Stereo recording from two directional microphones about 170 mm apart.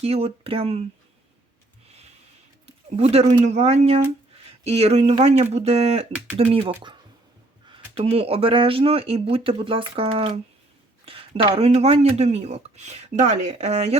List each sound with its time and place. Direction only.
0.0 s speech: 35° right (ahead or behind)
2.6 s a sound: 35° right (ahead or behind)
3.4 s speech: 40° right (ahead or behind)